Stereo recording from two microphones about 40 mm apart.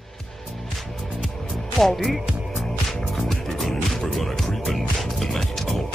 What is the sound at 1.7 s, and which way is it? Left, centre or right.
Speech, centre.